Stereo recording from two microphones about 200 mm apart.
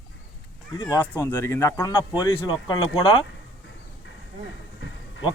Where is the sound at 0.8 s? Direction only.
15° left (ahead or behind).